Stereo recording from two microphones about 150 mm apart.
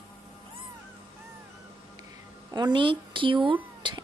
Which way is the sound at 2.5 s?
30° right (ahead or behind).